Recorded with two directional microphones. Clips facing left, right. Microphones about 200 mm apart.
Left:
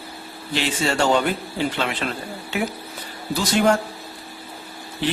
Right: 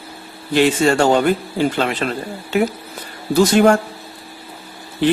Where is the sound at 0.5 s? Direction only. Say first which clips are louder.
Right 8 dB; 50° right (ahead or behind).